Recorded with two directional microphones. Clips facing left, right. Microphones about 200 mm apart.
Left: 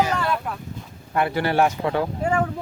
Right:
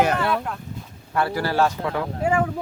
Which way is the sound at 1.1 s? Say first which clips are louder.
Left 1 dB; 20° left (ahead or behind).